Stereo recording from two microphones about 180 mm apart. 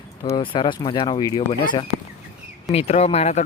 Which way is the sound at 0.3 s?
25° left (ahead or behind).